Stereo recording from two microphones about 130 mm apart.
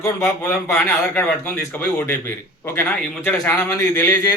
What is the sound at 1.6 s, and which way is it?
A man's voice, 20° left (ahead or behind).